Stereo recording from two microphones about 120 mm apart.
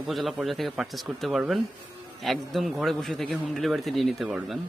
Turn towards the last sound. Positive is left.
turn(degrees=-5)  # may be behind; listen again after turning